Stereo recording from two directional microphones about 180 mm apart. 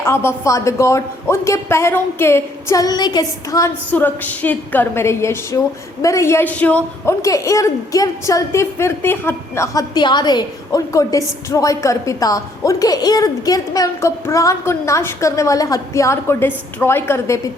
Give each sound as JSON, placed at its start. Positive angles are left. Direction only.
{"t": 0.0, "sound": "a woman's voice", "side_deg": 15}
{"t": 3.9, "sound": "a woman's voice", "side_deg": 10}